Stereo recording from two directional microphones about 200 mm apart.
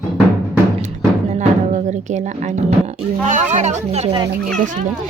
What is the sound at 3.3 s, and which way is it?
Speech, 40° right (ahead or behind).